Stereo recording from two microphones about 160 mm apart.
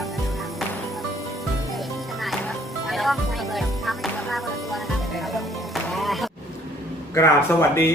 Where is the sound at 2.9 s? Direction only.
Centre (ahead or behind).